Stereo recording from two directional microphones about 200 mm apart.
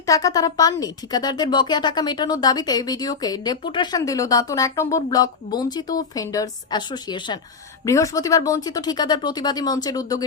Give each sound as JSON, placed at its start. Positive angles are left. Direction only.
{"t": 0.0, "sound": "speech", "side_deg": 15}